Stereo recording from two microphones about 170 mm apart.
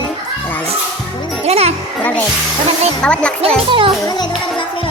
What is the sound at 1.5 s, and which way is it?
Music, 35° right (ahead or behind).